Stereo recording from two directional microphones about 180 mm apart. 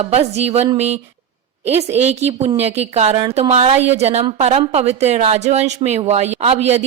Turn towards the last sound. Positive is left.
turn(degrees=-35)  # may be behind; listen again after turning